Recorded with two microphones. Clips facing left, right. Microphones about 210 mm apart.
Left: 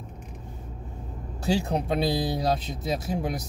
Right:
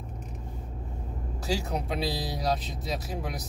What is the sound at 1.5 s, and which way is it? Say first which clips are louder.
Speech: left 5 dB; 25° left (ahead or behind).